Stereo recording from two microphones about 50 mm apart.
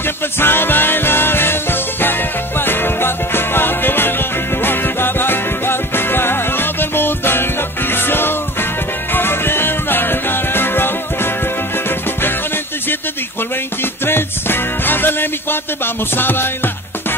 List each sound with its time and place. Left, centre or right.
0.4 s music: left
14.0 s music: left